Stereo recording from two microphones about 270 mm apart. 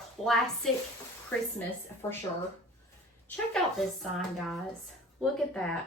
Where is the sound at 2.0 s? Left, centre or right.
Centre.